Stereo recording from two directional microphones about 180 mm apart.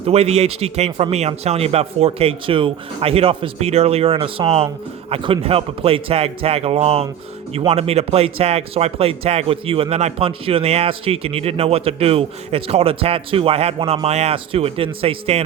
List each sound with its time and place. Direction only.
0.0 s speech: 35° right (ahead or behind)